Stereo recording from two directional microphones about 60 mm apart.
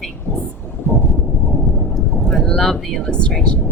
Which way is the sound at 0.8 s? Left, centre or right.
Left.